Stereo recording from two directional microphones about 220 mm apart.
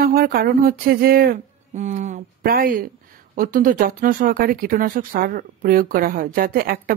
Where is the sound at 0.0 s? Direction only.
45° right (ahead or behind).